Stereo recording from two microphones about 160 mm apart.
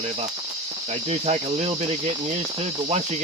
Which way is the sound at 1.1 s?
40° right (ahead or behind).